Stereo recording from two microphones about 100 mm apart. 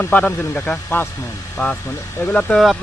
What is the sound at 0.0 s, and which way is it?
Speech, 15° left (ahead or behind).